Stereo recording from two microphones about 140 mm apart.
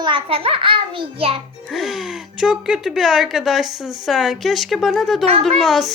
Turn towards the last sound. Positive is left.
turn(degrees=0)  # may be behind; listen again after turning